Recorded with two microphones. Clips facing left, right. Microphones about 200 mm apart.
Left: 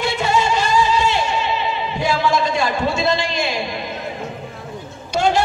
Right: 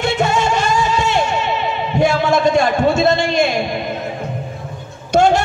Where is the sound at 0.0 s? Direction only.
50° right (ahead or behind).